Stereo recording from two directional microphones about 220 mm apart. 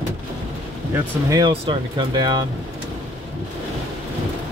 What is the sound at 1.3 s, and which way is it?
Speech, 20° right (ahead or behind).